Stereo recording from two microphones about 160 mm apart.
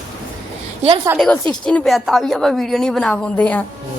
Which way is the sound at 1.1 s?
10° right (ahead or behind).